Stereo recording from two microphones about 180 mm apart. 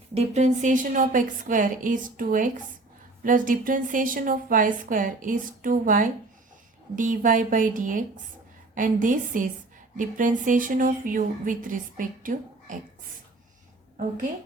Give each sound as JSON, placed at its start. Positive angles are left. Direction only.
{"t": 0.1, "sound": "a woman's voice", "side_deg": -35}